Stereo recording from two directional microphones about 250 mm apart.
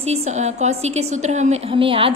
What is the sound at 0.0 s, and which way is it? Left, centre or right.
A woman's voice, right.